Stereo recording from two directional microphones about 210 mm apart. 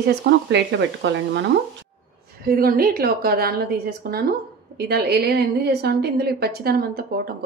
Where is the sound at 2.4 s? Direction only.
45° right (ahead or behind).